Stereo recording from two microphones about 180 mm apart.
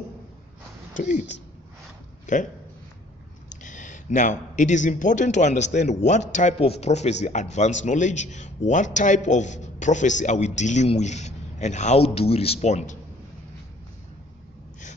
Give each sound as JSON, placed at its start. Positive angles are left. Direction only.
{"t": 0.9, "sound": "speech", "side_deg": 45}
{"t": 2.3, "sound": "speech", "side_deg": 45}
{"t": 3.4, "sound": "a man's voice", "side_deg": 45}